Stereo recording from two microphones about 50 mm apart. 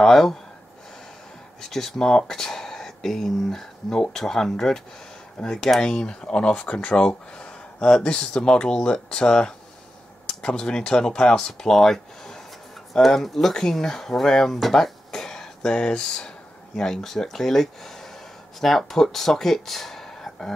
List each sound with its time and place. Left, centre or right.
0.0 s speech: centre
1.6 s speech: centre